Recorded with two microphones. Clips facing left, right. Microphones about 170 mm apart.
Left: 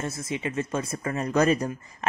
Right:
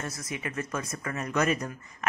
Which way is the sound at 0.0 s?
25° left (ahead or behind).